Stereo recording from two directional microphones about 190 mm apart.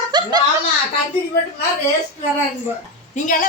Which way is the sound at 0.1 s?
20° right (ahead or behind).